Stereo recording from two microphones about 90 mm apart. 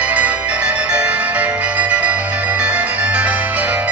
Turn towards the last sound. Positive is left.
turn(degrees=-15)  # may be behind; listen again after turning